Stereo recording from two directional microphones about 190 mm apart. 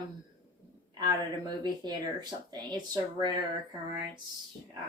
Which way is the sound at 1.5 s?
20° right (ahead or behind).